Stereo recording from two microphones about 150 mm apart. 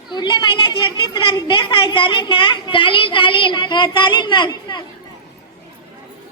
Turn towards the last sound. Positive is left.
turn(degrees=30)  # may be behind; listen again after turning